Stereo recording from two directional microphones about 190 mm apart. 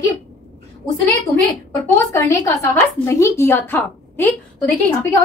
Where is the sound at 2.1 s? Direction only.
15° left (ahead or behind).